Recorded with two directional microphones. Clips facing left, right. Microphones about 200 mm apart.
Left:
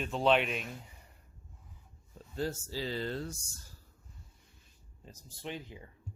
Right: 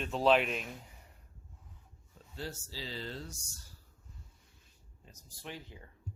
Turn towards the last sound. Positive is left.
turn(degrees=20)  # may be behind; listen again after turning